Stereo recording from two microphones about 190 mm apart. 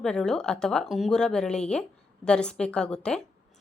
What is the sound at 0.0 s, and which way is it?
Speech, 5° left (ahead or behind).